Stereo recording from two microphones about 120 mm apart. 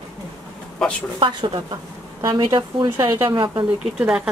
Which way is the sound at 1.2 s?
40° right (ahead or behind).